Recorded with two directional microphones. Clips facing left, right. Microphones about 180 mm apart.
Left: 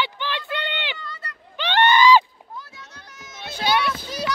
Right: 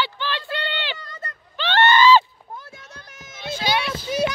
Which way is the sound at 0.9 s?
45° right (ahead or behind).